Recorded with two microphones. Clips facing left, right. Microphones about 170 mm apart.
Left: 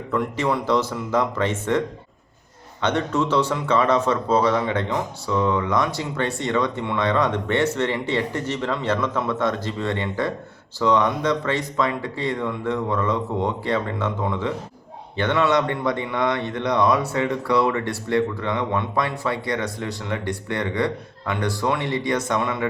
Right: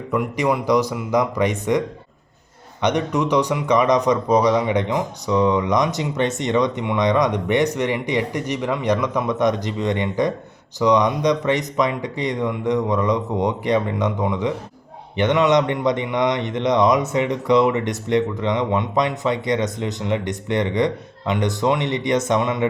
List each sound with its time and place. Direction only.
0.1 s speech: 15° right (ahead or behind)
2.8 s speech: 15° right (ahead or behind)